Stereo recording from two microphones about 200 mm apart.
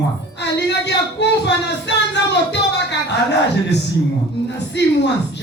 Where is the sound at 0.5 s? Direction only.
60° left (ahead or behind).